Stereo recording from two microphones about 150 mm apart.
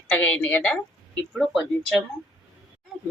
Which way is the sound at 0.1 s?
10° left (ahead or behind).